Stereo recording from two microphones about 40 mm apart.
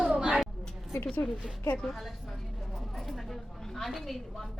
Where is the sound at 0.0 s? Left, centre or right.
Right.